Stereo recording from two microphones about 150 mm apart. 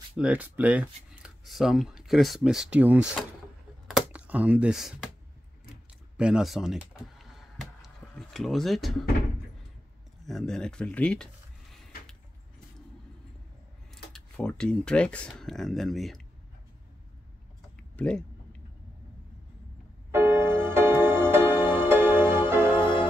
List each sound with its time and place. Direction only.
0.1 s speech: 10° right (ahead or behind)
3.8 s computer keyboard: 5° right (ahead or behind)
6.1 s a sound: 5° right (ahead or behind)
10.2 s speech: 5° left (ahead or behind)
14.1 s speech: 5° left (ahead or behind)
17.9 s a sound: 10° left (ahead or behind)
20.1 s music: 15° right (ahead or behind)